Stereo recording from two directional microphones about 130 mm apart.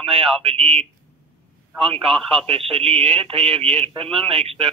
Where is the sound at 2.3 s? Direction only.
45° right (ahead or behind).